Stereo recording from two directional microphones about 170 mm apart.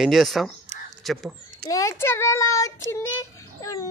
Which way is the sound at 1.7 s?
20° left (ahead or behind).